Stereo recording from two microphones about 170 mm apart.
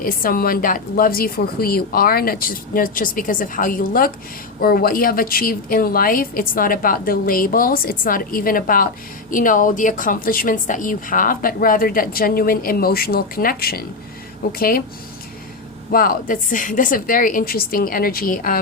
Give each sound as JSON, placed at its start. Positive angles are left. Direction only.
{"t": 0.0, "sound": "a woman's voice", "side_deg": 55}
{"t": 15.9, "sound": "a woman's voice", "side_deg": 55}